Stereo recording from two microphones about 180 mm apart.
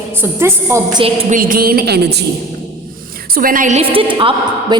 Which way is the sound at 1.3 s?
50° right (ahead or behind).